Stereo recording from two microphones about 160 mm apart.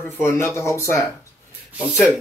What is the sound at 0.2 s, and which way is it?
Speech, 15° left (ahead or behind).